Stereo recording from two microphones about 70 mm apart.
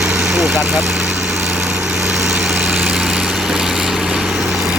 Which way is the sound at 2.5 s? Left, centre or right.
Right.